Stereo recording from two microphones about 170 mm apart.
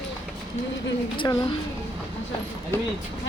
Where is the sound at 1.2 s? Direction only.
30° left (ahead or behind).